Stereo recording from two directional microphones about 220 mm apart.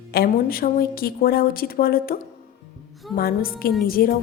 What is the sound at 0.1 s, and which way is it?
A woman's voice, 45° left (ahead or behind).